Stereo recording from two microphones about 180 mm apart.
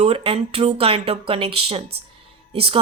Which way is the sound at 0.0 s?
30° right (ahead or behind).